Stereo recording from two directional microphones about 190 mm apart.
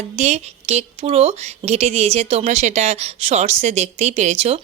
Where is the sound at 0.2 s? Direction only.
35° right (ahead or behind).